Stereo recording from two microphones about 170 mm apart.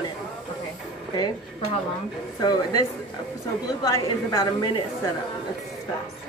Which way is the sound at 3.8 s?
20° left (ahead or behind).